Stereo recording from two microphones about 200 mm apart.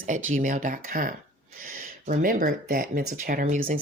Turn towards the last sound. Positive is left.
turn(degrees=-35)  # may be behind; listen again after turning